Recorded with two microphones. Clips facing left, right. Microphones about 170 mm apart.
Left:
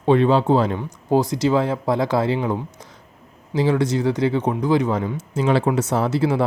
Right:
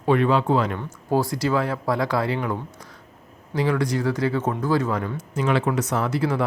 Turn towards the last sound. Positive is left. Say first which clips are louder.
# left 4 dB
turn(degrees=25)  # may be behind; listen again after turning